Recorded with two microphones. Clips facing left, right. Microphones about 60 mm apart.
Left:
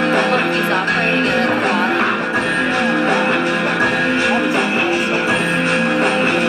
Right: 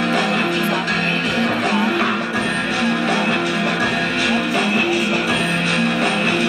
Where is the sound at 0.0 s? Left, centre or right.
Left.